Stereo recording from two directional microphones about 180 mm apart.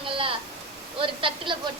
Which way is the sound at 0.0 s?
30° right (ahead or behind).